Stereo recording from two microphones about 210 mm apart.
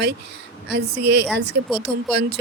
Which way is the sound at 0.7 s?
55° right (ahead or behind).